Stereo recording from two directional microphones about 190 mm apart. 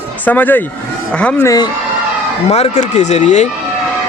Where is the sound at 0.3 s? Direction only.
10° left (ahead or behind).